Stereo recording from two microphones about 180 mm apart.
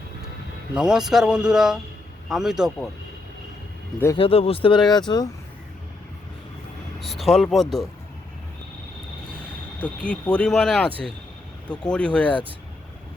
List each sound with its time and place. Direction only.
0.8 s a man's voice: 5° right (ahead or behind)
4.2 s speech: 30° left (ahead or behind)
7.0 s a man's voice: centre (ahead or behind)
9.8 s a man's voice: 5° left (ahead or behind)